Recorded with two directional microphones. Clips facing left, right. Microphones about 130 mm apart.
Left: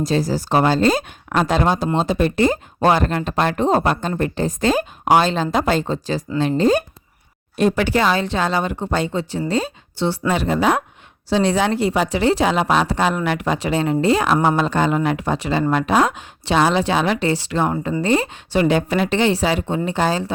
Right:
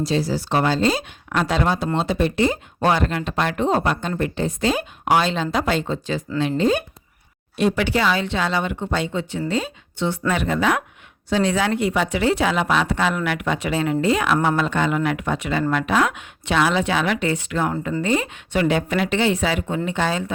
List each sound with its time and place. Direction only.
0.0 s a woman's voice: 45° left (ahead or behind)